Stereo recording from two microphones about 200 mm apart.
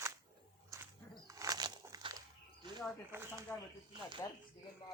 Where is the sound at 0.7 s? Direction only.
15° right (ahead or behind).